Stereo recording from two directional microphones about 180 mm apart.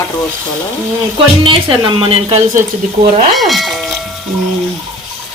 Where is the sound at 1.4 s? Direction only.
30° right (ahead or behind).